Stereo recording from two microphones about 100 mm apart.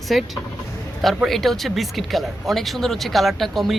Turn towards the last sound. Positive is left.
turn(degrees=0)  # may be behind; listen again after turning